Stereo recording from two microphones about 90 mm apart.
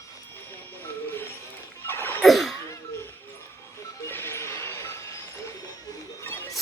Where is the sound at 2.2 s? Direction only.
Centre (ahead or behind).